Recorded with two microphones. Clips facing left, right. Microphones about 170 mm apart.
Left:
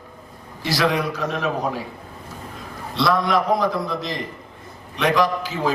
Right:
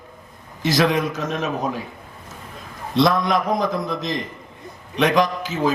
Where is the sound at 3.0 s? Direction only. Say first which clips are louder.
Right 2 dB; 20° right (ahead or behind).